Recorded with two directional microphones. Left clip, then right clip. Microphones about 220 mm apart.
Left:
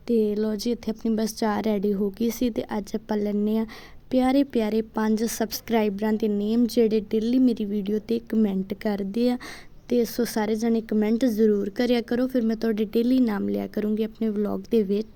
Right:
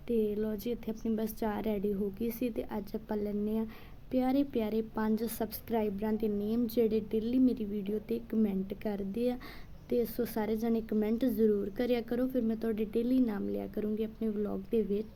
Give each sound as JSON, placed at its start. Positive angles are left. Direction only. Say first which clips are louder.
{"t": 0.1, "sound": "a woman's voice", "louder": "left 8 dB", "side_deg": 40}